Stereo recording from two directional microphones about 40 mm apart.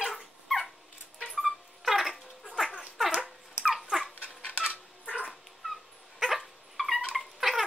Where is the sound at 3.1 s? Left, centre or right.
Centre.